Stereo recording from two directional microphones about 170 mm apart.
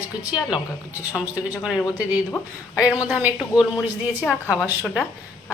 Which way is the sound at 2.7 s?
5° right (ahead or behind).